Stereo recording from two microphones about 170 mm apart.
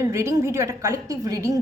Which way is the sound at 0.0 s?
15° right (ahead or behind).